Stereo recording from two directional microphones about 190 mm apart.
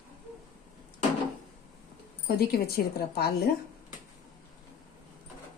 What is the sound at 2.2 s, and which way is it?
Speech, 55° left (ahead or behind).